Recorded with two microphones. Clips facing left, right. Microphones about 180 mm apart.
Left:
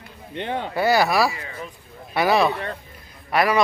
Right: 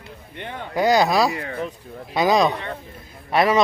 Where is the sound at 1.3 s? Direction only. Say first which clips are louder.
Right 7 dB; 60° right (ahead or behind).